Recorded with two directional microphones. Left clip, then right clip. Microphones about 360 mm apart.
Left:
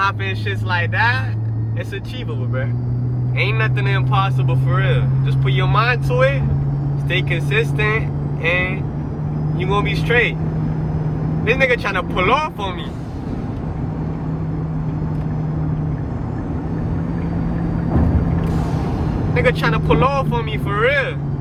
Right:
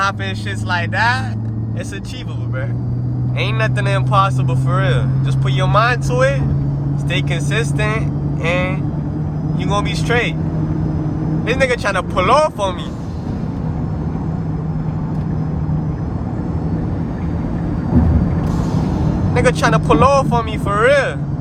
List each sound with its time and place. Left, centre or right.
0.7 s speech: centre
3.3 s speech: centre
11.4 s speech: centre
19.4 s speech: centre